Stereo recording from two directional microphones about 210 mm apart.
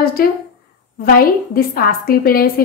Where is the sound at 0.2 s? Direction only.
45° left (ahead or behind).